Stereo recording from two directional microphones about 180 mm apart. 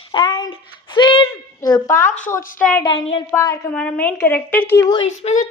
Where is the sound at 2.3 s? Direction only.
15° left (ahead or behind).